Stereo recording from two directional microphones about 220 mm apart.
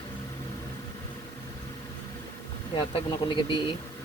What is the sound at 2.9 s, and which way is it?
Speech, 20° left (ahead or behind).